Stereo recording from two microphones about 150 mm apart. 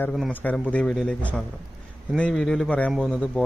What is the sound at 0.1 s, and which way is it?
Speech, centre (ahead or behind).